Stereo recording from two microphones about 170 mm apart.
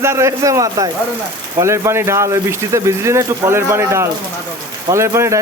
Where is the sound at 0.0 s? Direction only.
15° right (ahead or behind).